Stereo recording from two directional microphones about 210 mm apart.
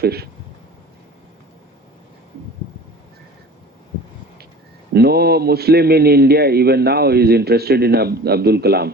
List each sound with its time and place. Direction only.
0.0 s a man's voice: 50° right (ahead or behind)
4.9 s a man's voice: 50° right (ahead or behind)